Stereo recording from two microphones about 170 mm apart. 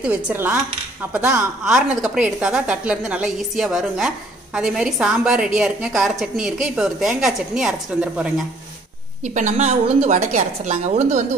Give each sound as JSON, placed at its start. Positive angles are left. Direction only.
{"t": 0.0, "sound": "a woman's voice", "side_deg": -10}
{"t": 9.2, "sound": "a woman's voice", "side_deg": -45}